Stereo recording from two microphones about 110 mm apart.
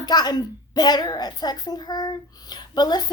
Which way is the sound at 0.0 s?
40° left (ahead or behind).